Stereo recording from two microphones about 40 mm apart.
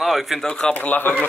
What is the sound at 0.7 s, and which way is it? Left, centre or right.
Speech, left.